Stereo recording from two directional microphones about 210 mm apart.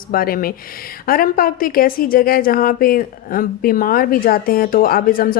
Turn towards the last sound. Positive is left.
turn(degrees=40)  # may be behind; listen again after turning